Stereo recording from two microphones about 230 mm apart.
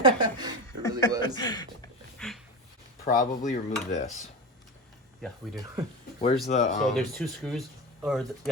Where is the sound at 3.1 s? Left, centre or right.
Left.